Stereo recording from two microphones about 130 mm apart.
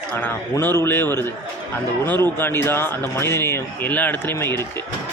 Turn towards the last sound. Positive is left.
turn(degrees=15)  # may be behind; listen again after turning